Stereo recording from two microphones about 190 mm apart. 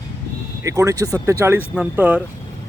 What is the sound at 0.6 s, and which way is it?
Speech, 15° right (ahead or behind).